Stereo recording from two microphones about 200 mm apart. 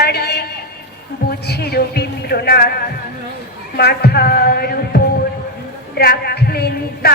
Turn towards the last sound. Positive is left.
turn(degrees=50)  # may be behind; listen again after turning